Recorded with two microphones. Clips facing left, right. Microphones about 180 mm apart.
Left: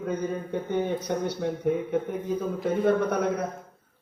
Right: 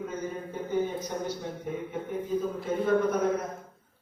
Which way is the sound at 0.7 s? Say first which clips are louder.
Left 2 dB; 70° left (ahead or behind).